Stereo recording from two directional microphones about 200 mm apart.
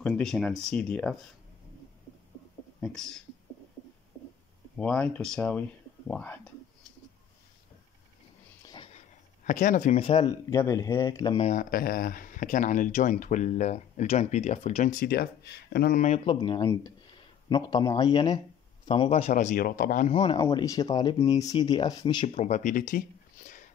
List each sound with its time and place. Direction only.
0.0 s speech: centre (ahead or behind)
2.8 s speech: centre (ahead or behind)
4.7 s speech: 5° left (ahead or behind)
8.6 s a sound: 25° left (ahead or behind)
9.4 s speech: 40° left (ahead or behind); by 11.4 s 20° left (ahead or behind)
11.4 s speech: 45° left (ahead or behind)
16.3 s speech: 25° left (ahead or behind); by 20.1 s 45° left (ahead or behind)
20.1 s speech: 25° left (ahead or behind); by 23.7 s 40° left (ahead or behind)